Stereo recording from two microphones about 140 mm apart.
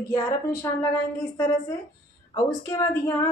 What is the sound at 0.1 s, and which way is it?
A woman's voice, 20° left (ahead or behind).